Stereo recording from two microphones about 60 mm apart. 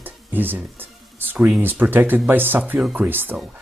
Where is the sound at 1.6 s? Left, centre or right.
Right.